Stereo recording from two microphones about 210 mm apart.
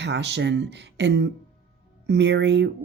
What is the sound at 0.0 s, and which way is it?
Speech, 55° right (ahead or behind).